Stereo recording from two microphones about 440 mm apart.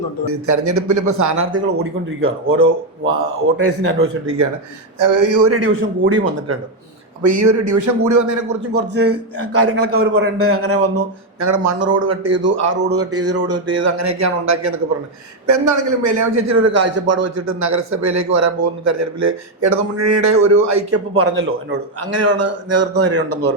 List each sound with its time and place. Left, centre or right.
0.3 s a man's voice: right
1.4 s speech: right
4.9 s a man's voice: right
8.9 s a man's voice: right